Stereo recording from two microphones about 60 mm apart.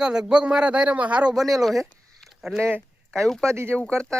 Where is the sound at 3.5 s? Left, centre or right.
Right.